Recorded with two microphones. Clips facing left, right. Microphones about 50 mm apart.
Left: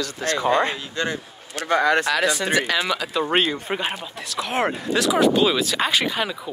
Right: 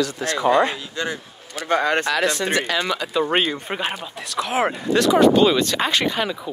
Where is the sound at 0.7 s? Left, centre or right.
Left.